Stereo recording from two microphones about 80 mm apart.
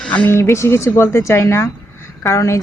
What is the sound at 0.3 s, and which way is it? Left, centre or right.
Speech, left.